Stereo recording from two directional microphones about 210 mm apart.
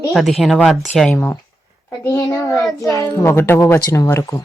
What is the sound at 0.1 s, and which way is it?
A woman's voice, centre (ahead or behind).